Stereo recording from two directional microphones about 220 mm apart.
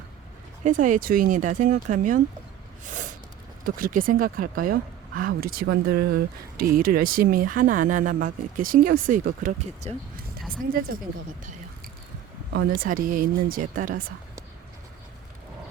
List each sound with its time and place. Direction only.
0.6 s speech: 35° right (ahead or behind)
2.8 s a sound: 35° right (ahead or behind)
3.8 s speech: 40° right (ahead or behind)
12.8 s speech: 40° right (ahead or behind)